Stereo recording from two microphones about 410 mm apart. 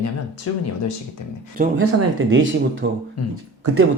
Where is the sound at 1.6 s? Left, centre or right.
Right.